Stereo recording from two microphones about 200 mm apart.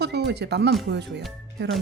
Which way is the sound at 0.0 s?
55° right (ahead or behind).